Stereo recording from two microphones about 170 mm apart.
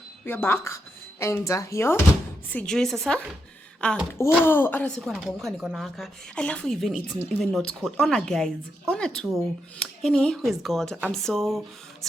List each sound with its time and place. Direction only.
0.3 s a woman's voice: 15° left (ahead or behind)